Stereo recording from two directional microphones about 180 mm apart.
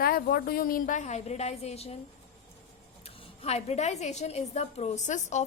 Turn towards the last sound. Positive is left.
turn(degrees=40)  # may be behind; listen again after turning